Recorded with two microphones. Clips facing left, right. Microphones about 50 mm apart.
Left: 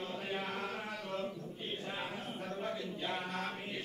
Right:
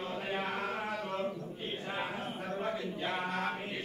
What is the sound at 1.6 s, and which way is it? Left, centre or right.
Chant, centre.